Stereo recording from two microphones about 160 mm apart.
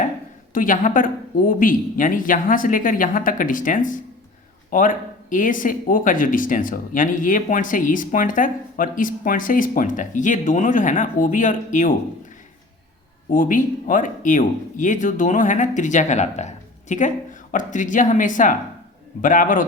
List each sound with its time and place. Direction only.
0.5 s speech: 55° left (ahead or behind)
13.3 s speech: 55° left (ahead or behind)